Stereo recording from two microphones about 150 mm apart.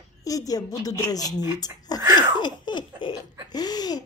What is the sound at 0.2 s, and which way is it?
A woman's voice, 25° left (ahead or behind).